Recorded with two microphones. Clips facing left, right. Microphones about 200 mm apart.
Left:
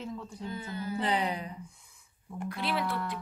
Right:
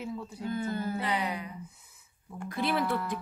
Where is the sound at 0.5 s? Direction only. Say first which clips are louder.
Right 6 dB; 50° right (ahead or behind).